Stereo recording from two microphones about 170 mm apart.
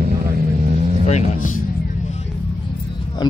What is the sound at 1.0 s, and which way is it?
Speech, 40° left (ahead or behind).